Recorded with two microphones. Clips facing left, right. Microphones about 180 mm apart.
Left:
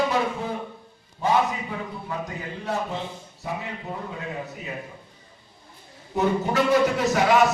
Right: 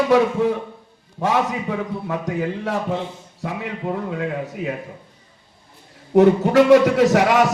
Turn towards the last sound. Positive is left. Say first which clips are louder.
# right 4 dB
turn(degrees=-90)